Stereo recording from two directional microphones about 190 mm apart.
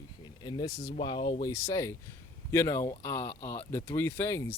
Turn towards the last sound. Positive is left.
turn(degrees=15)  # may be behind; listen again after turning